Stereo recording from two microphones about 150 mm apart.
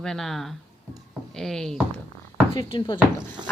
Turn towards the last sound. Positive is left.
turn(degrees=-30)  # may be behind; listen again after turning